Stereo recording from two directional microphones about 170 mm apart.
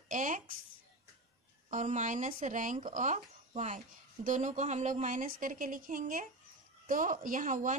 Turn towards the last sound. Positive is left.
turn(degrees=-50)  # may be behind; listen again after turning